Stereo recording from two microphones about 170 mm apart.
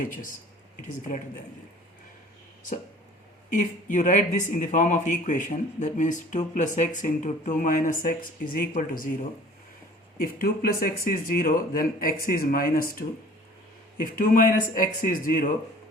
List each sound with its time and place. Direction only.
3.5 s speech: 50° left (ahead or behind)
10.2 s speech: 60° left (ahead or behind)
14.0 s speech: 55° left (ahead or behind)